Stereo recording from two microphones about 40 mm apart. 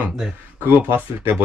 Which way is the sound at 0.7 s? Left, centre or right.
Right.